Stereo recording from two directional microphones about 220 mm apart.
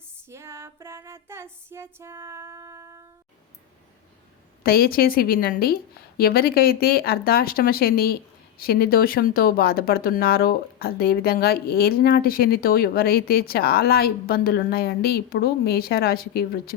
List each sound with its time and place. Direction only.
0.3 s female singing: 10° right (ahead or behind)
4.6 s a woman's voice: 45° left (ahead or behind)